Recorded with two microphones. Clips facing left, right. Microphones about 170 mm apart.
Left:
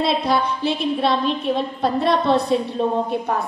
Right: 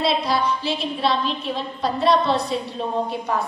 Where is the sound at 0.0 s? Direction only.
55° left (ahead or behind).